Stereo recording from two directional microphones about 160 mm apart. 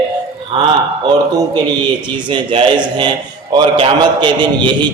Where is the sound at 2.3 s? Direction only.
30° right (ahead or behind).